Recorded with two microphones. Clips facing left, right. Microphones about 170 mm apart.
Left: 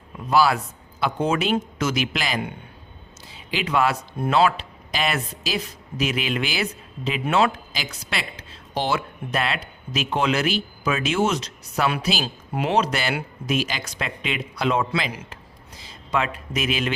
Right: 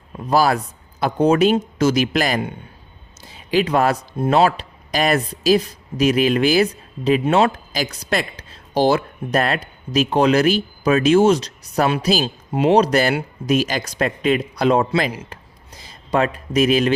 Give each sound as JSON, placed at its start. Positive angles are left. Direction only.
{"t": 0.3, "sound": "speech", "side_deg": -40}
{"t": 12.2, "sound": "speech", "side_deg": -25}
{"t": 12.8, "sound": "speech", "side_deg": -40}